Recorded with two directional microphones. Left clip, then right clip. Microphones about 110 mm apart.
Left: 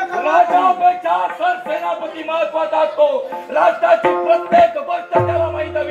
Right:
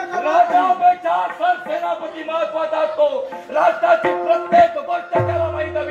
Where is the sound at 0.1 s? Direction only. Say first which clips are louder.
Left 1 dB; 20° left (ahead or behind).